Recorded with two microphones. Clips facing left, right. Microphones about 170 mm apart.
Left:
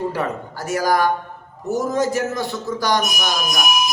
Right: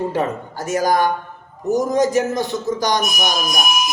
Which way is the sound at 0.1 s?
20° right (ahead or behind).